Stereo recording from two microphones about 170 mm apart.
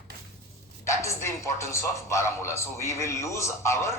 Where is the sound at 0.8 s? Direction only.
15° left (ahead or behind).